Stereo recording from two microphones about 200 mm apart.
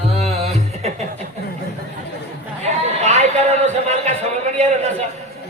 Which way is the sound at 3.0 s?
35° right (ahead or behind).